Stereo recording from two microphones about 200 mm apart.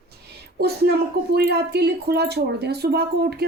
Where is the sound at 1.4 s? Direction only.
55° right (ahead or behind).